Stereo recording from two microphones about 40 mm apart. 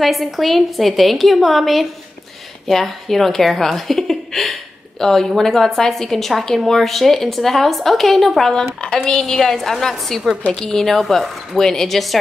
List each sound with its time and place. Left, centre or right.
0.0 s a woman's voice: centre